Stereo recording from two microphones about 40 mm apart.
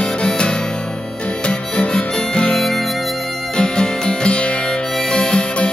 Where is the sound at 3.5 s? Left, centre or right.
Left.